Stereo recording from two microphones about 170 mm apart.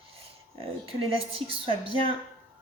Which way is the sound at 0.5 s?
35° right (ahead or behind).